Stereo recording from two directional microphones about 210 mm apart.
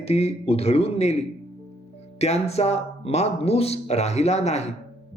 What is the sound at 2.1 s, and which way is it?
Speech, 30° left (ahead or behind).